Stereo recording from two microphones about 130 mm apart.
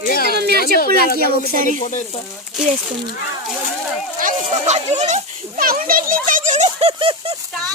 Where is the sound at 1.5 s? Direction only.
90° right.